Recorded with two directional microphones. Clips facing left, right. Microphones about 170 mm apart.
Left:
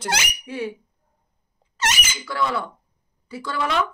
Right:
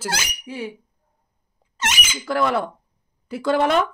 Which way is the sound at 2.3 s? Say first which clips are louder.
Right 4 dB; 55° right (ahead or behind).